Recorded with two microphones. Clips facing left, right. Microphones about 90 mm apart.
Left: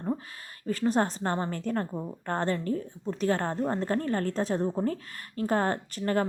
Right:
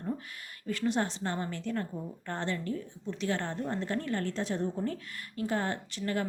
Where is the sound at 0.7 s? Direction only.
40° left (ahead or behind).